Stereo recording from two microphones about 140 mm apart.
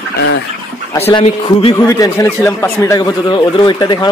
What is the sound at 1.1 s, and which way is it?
Speech, 35° left (ahead or behind).